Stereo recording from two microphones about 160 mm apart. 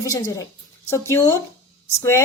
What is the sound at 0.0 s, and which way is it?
A woman's voice, 20° left (ahead or behind).